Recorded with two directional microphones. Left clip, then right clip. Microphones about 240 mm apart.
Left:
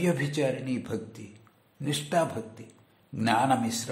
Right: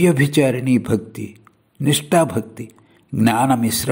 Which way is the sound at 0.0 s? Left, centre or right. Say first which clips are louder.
Right 12 dB; right.